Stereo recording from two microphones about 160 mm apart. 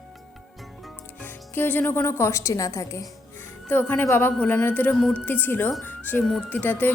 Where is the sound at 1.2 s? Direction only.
10° left (ahead or behind).